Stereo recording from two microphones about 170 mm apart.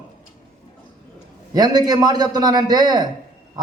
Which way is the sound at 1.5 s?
25° right (ahead or behind).